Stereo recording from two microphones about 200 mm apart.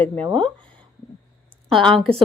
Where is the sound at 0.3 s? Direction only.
25° right (ahead or behind).